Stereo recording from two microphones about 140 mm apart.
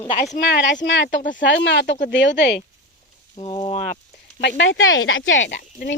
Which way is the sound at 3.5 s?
45° left (ahead or behind).